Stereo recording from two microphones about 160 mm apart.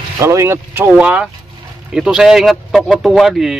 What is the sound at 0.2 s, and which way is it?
A man's voice, 15° right (ahead or behind).